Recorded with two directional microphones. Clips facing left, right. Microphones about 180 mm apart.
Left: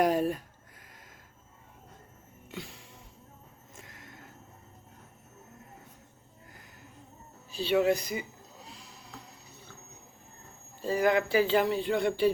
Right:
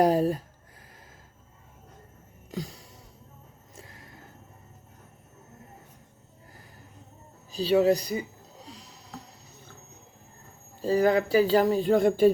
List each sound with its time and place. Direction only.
0.0 s a man's voice: 35° right (ahead or behind)
2.5 s a sound: 40° right (ahead or behind)
7.5 s a man's voice: 40° right (ahead or behind)
8.6 s snoring: 40° right (ahead or behind)
10.8 s a man's voice: 35° right (ahead or behind)